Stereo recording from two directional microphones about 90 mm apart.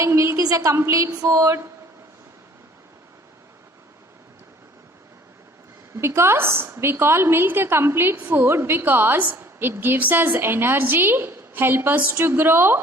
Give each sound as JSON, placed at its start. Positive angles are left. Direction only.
{"t": 0.0, "sound": "a woman's voice", "side_deg": -30}
{"t": 6.0, "sound": "a woman's voice", "side_deg": -30}